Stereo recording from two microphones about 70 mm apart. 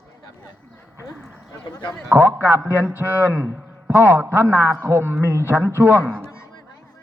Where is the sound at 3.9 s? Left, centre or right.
Right.